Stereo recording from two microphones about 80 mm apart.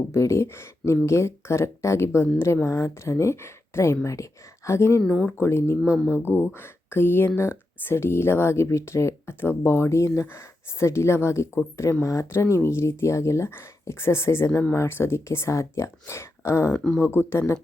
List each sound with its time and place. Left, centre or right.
0.1 s speech: left
16.7 s speech: centre
17.0 s speech: left